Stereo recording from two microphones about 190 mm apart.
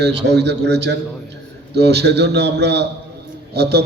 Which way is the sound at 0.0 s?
65° right (ahead or behind).